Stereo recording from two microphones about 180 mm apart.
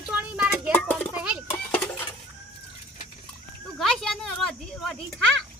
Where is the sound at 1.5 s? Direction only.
10° left (ahead or behind).